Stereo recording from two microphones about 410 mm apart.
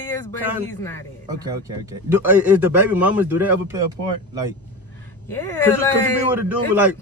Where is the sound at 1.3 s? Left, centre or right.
Centre.